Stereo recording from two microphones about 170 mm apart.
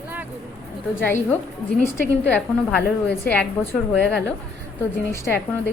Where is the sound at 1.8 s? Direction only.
5° left (ahead or behind).